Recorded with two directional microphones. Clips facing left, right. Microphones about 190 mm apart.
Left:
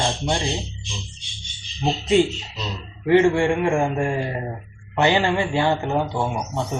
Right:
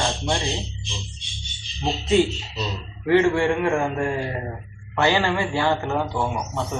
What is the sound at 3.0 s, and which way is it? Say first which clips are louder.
Speech: left 2 dB; 15° left (ahead or behind).